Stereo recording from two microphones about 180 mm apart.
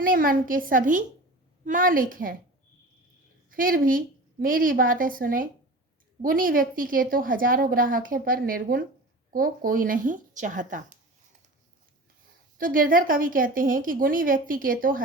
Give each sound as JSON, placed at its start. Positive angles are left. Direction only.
{"t": 0.0, "sound": "a woman's voice", "side_deg": -50}
{"t": 3.5, "sound": "a woman's voice", "side_deg": -50}
{"t": 12.5, "sound": "a woman's voice", "side_deg": -50}